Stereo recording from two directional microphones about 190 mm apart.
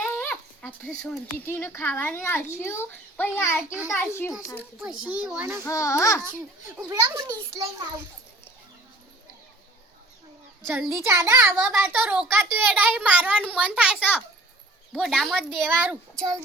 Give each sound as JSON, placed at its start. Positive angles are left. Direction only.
{"t": 0.0, "sound": "a child's voice", "side_deg": 10}
{"t": 4.8, "sound": "a child's voice", "side_deg": -5}
{"t": 5.6, "sound": "a child's voice", "side_deg": 15}
{"t": 6.7, "sound": "a child's voice", "side_deg": -15}
{"t": 11.0, "sound": "a child's voice", "side_deg": -15}